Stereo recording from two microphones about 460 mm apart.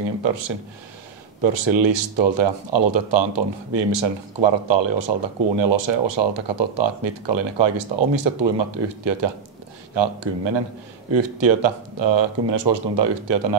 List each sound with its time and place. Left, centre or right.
0.2 s speech: right